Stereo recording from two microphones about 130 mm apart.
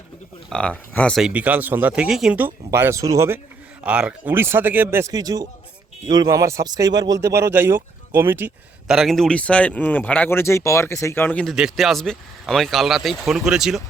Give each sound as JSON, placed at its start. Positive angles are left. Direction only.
{"t": 0.5, "sound": "speech", "side_deg": 10}
{"t": 1.2, "sound": "speech", "side_deg": -10}
{"t": 2.6, "sound": "speech", "side_deg": -20}
{"t": 3.8, "sound": "speech", "side_deg": -10}
{"t": 5.1, "sound": "a man's voice", "side_deg": -30}
{"t": 8.9, "sound": "speech", "side_deg": 0}
{"t": 11.5, "sound": "speech", "side_deg": -5}